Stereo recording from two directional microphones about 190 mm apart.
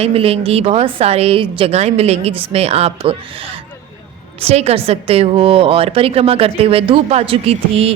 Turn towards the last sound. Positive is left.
turn(degrees=-30)  # may be behind; listen again after turning